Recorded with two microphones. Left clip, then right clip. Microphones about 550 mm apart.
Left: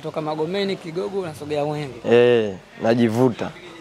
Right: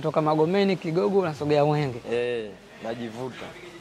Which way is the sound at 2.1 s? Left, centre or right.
Left.